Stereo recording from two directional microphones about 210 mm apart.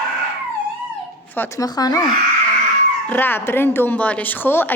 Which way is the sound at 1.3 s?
10° left (ahead or behind).